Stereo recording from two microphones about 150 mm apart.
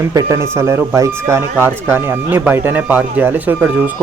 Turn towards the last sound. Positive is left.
turn(degrees=-10)  # may be behind; listen again after turning